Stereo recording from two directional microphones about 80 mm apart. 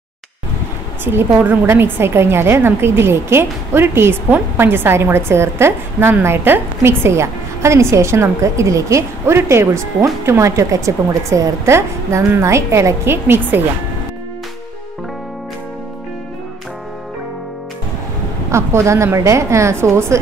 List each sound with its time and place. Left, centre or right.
1.0 s a woman's voice: right
18.5 s a woman's voice: right